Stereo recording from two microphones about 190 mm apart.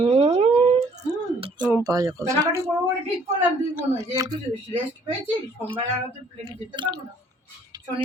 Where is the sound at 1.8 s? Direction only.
20° right (ahead or behind).